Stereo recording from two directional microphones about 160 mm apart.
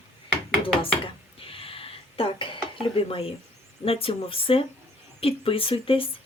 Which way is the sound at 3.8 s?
35° left (ahead or behind).